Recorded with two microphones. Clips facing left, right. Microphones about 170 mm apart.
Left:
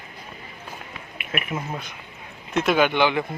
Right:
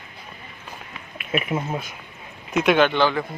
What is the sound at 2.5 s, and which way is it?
Speech, centre (ahead or behind).